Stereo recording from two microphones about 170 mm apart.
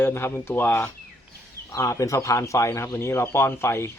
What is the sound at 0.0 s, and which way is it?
Speech, 15° left (ahead or behind).